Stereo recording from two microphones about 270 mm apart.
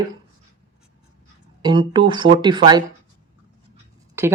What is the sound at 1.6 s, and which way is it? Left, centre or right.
Speech, centre.